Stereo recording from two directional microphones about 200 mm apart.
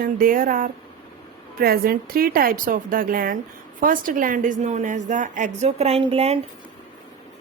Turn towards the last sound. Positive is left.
turn(degrees=-30)  # may be behind; listen again after turning